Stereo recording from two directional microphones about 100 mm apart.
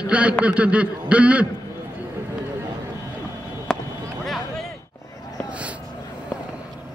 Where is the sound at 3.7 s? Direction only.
5° left (ahead or behind).